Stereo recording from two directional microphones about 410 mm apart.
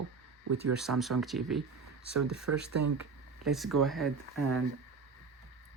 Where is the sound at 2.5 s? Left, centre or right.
Right.